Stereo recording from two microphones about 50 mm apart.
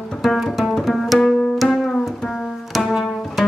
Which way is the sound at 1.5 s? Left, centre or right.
Centre.